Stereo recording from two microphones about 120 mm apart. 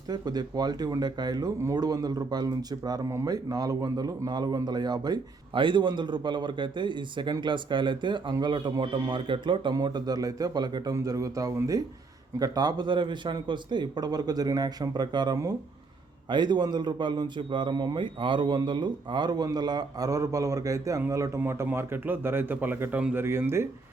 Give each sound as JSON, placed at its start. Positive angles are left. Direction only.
{"t": 0.1, "sound": "a man's voice", "side_deg": -35}